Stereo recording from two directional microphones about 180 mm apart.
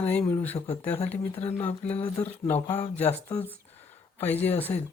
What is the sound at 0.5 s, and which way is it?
Speech, 35° left (ahead or behind).